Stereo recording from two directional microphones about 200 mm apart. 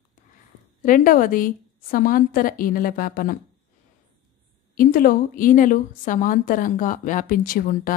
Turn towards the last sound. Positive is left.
turn(degrees=45)  # may be behind; listen again after turning